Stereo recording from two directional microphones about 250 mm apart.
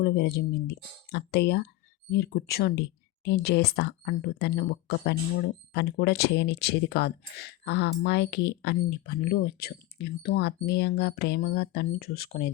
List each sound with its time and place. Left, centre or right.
0.0 s speech: left